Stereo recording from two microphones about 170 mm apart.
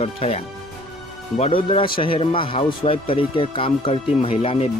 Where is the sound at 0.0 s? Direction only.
35° left (ahead or behind).